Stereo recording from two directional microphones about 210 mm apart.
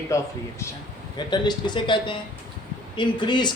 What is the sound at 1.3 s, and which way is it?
Speech, 20° left (ahead or behind).